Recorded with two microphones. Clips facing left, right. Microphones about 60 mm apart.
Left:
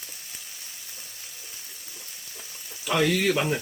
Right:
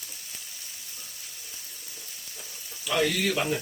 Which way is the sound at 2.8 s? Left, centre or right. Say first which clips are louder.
Left 3 dB; left.